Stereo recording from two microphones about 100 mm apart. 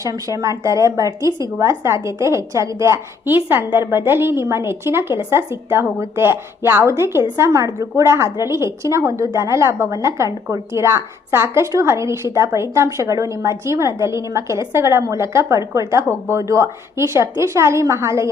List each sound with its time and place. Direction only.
0.0 s speech: 35° right (ahead or behind)